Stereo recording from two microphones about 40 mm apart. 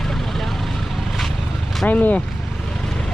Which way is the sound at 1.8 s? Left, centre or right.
Left.